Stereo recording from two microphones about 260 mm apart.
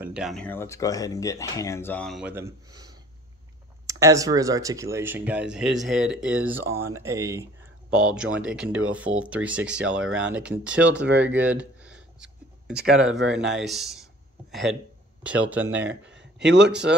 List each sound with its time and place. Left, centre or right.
0.0 s speech: centre
10.0 s speech: right
10.3 s speech: centre
11.1 s a sound: centre
13.5 s speech: centre
15.9 s speech: right